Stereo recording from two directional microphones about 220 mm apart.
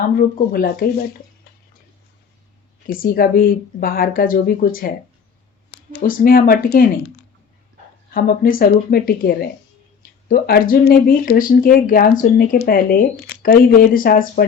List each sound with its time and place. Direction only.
0.2 s speech: 40° left (ahead or behind)
2.8 s speech: 40° left (ahead or behind)
5.9 s speech: 40° left (ahead or behind)
8.1 s speech: 40° left (ahead or behind)